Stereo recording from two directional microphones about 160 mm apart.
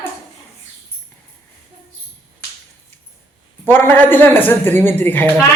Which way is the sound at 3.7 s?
15° left (ahead or behind).